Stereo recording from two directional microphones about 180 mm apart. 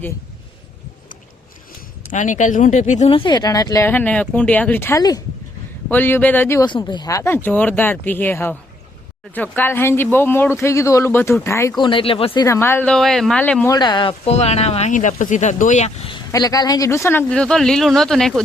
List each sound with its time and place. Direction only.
2.0 s speech: 45° left (ahead or behind); by 6.7 s 10° left (ahead or behind)
6.7 s speech: 25° left (ahead or behind)
11.8 s speech: 30° left (ahead or behind)
12.5 s speech: 15° left (ahead or behind)
13.7 s speech: 25° left (ahead or behind)
16.3 s speech: 20° left (ahead or behind); by 18.4 s centre (ahead or behind)